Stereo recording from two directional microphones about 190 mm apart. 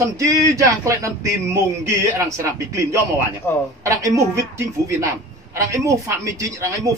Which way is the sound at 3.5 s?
10° left (ahead or behind).